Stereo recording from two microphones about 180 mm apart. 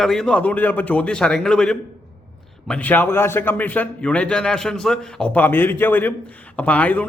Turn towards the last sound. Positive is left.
turn(degrees=10)  # may be behind; listen again after turning